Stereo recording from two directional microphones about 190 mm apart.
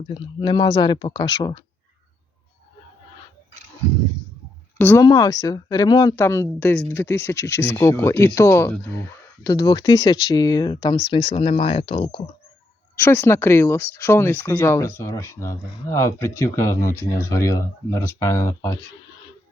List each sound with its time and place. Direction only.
0.1 s speech: 25° left (ahead or behind)
4.8 s speech: 10° left (ahead or behind); by 12.2 s 30° left (ahead or behind)
13.0 s speech: 10° left (ahead or behind)